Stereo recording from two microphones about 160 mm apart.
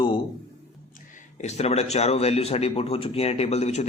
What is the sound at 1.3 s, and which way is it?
Speech, 45° left (ahead or behind).